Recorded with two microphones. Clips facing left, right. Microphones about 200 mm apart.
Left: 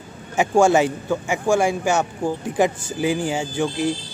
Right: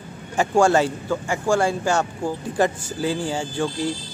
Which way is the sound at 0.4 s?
20° left (ahead or behind).